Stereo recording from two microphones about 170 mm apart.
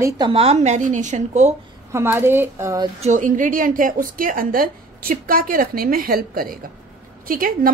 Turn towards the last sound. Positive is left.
turn(degrees=-55)  # may be behind; listen again after turning